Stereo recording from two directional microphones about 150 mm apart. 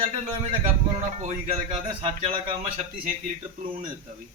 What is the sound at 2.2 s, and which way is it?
Speech, 40° right (ahead or behind).